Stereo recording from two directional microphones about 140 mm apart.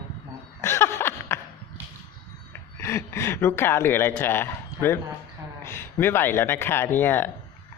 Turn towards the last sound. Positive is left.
turn(degrees=15)  # may be behind; listen again after turning